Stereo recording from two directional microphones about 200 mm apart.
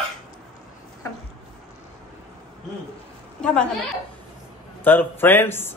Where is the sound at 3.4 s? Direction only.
5° left (ahead or behind).